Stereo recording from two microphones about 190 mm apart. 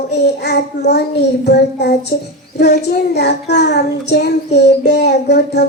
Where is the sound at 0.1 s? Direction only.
60° left (ahead or behind).